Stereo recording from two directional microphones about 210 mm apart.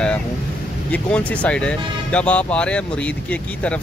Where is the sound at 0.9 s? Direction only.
5° left (ahead or behind).